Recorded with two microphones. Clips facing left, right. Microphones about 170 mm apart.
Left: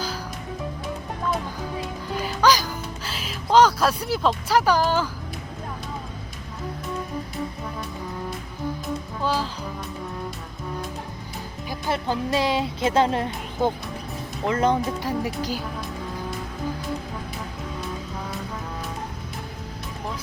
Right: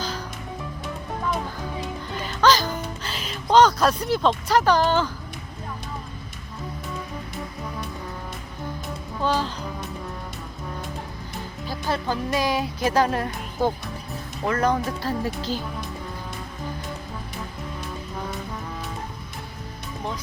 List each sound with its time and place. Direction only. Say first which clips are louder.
2.2 s music: right 1 dB; 10° left (ahead or behind)
9.2 s music: right 2 dB; 5° left (ahead or behind)
11.7 s speech: even; 20° left (ahead or behind)